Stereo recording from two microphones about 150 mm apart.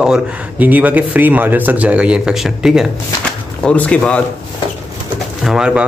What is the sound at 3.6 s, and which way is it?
Speech, 10° left (ahead or behind).